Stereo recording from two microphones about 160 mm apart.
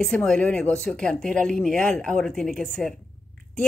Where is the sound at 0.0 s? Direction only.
5° left (ahead or behind).